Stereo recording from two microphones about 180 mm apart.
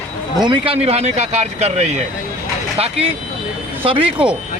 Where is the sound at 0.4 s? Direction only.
30° right (ahead or behind).